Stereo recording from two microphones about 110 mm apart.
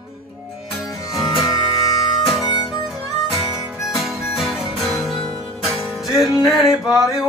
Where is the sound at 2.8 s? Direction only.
Centre (ahead or behind).